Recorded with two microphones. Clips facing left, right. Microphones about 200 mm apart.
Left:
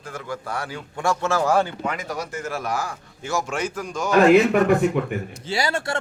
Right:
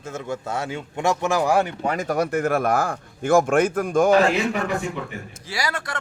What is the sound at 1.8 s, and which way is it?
Speech, 45° right (ahead or behind).